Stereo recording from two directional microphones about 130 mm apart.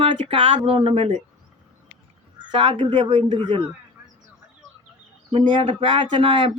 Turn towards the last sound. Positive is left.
turn(degrees=-40)  # may be behind; listen again after turning